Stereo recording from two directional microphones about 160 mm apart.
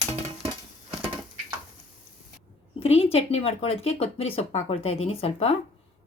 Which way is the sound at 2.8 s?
40° left (ahead or behind).